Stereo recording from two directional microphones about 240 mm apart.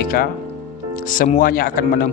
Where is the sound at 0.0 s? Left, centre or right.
Left.